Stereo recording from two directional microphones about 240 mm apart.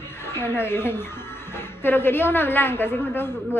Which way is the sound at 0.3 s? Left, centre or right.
Centre.